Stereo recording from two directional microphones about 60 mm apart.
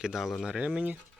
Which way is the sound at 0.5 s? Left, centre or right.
Centre.